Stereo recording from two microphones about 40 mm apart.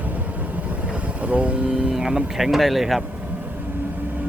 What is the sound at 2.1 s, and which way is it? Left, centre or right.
Speech, centre.